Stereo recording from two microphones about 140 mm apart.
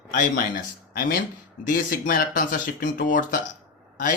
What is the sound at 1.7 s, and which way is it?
Speech, 90° left.